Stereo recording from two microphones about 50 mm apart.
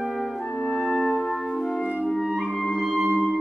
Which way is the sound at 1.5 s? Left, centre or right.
Centre.